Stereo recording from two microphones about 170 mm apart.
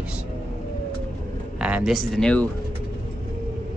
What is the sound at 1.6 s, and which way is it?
Speech, 5° right (ahead or behind).